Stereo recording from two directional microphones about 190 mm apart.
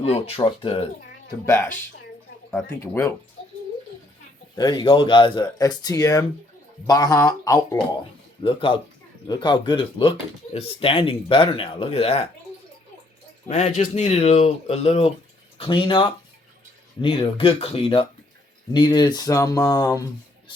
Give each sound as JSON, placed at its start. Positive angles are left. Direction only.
{"t": 0.0, "sound": "speech", "side_deg": 30}
{"t": 1.5, "sound": "speech", "side_deg": 15}
{"t": 4.5, "sound": "speech", "side_deg": 20}
{"t": 13.5, "sound": "speech", "side_deg": 35}